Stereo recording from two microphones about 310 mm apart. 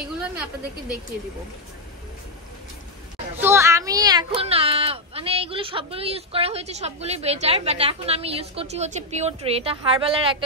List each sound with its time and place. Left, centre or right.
3.3 s speech: centre